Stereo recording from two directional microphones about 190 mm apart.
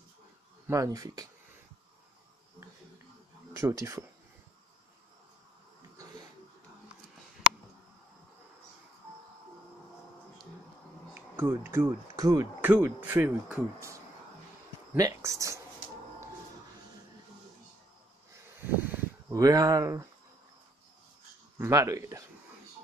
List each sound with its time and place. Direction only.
0.7 s speech: 20° right (ahead or behind)
3.6 s speech: 15° right (ahead or behind)
11.1 s speech: 10° right (ahead or behind)
15.0 s speech: 15° right (ahead or behind)
18.9 s speech: 20° right (ahead or behind)
21.5 s speech: 15° right (ahead or behind)